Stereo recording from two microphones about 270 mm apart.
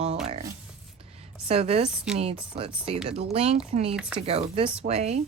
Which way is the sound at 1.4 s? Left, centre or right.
Right.